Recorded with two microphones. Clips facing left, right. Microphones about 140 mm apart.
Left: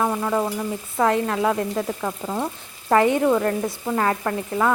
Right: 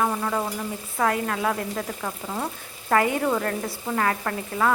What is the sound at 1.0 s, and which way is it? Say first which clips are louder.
Speech: left 4 dB; 25° left (ahead or behind).